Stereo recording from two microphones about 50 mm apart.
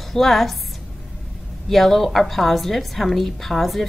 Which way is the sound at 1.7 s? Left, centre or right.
Centre.